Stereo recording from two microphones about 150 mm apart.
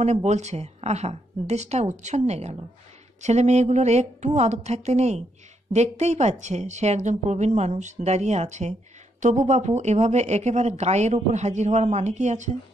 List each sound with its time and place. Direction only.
0.0 s a woman's voice: 50° right (ahead or behind)